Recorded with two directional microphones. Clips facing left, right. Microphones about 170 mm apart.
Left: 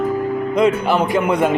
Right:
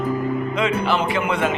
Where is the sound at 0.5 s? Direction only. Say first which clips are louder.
Left 7 dB; 40° left (ahead or behind).